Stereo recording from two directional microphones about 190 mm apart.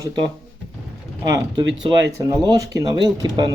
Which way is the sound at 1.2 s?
25° right (ahead or behind).